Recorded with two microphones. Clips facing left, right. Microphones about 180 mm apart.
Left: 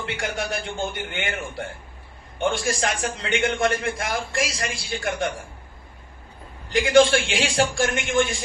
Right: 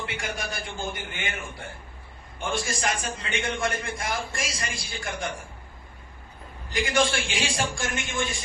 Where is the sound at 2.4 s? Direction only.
90° left.